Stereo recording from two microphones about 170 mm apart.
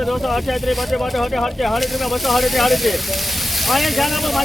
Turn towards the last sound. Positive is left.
turn(degrees=0)  # may be behind; listen again after turning